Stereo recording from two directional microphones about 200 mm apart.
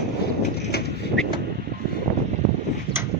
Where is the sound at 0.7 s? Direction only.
50° left (ahead or behind).